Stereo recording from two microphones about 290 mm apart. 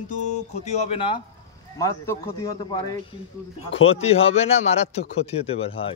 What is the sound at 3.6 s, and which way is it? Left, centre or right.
A man's voice, centre.